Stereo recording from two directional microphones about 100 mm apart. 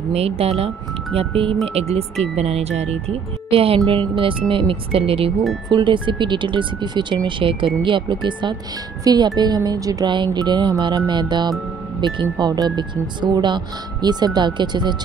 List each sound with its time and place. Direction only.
0.1 s speech: 90° right
1.1 s speech: 65° right (ahead or behind)
1.7 s speech: 90° right; by 4.0 s 70° right (ahead or behind)
4.2 s speech: 60° right (ahead or behind)
5.7 s speech: 50° right (ahead or behind)
10.0 s speech: 50° right (ahead or behind)